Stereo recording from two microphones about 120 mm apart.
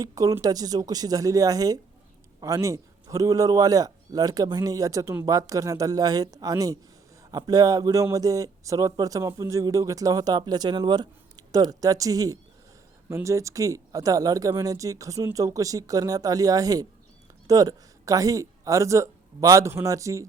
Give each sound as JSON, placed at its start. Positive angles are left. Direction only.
{"t": 0.0, "sound": "a man's voice", "side_deg": -30}